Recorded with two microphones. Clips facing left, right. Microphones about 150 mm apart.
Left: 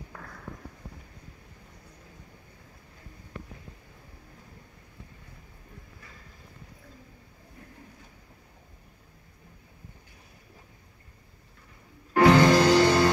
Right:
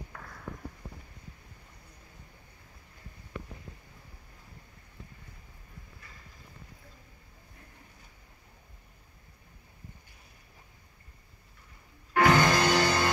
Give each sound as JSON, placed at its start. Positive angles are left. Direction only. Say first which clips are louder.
{"t": 12.1, "sound": "music", "louder": "left 5 dB", "side_deg": 30}